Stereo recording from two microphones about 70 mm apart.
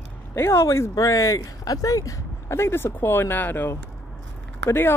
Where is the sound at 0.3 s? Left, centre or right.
Left.